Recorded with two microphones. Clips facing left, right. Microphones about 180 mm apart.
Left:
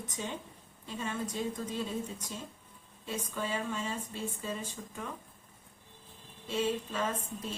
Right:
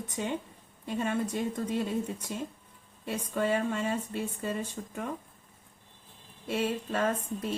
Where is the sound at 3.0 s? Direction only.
60° right (ahead or behind).